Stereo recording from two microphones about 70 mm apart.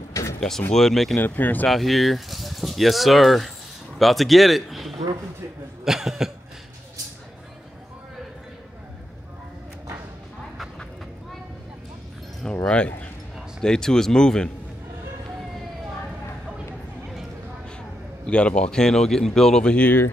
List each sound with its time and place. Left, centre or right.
0.1 s a sound: left
0.4 s speech: centre
1.1 s speech: left
1.7 s a man's voice: centre
5.9 s cough: centre
12.6 s speech: centre
18.2 s speech: centre